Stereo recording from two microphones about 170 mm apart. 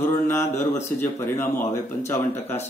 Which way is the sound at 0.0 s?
15° left (ahead or behind).